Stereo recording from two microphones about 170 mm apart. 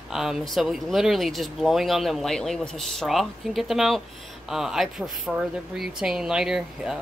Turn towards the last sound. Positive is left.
turn(degrees=-5)  # may be behind; listen again after turning